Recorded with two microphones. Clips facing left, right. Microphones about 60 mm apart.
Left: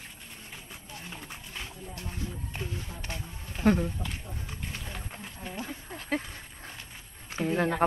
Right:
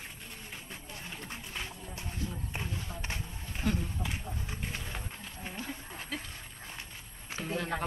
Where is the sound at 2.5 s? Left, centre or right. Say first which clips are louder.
Left 1 dB; centre.